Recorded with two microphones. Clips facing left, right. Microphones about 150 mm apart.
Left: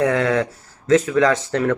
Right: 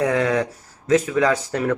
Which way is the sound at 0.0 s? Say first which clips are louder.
Left 1 dB; 35° right (ahead or behind).